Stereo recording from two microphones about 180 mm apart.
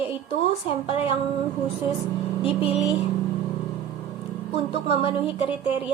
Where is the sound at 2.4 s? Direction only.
30° left (ahead or behind).